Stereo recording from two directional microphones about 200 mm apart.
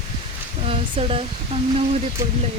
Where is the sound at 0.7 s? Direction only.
30° right (ahead or behind).